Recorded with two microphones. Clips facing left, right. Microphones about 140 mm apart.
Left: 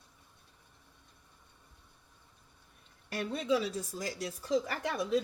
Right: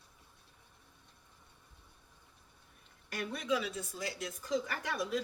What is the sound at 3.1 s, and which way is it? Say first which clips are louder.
Speech: left 4 dB; 30° left (ahead or behind).